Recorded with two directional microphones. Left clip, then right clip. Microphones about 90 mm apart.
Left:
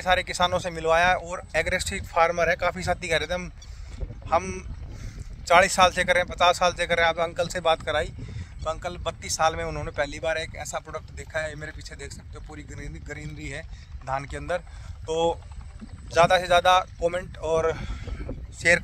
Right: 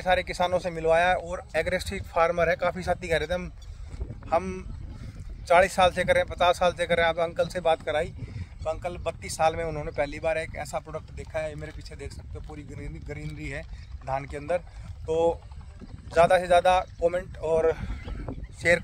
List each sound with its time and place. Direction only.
0.0 s speech: centre (ahead or behind)
4.3 s a sound: 20° right (ahead or behind)
5.4 s speech: centre (ahead or behind)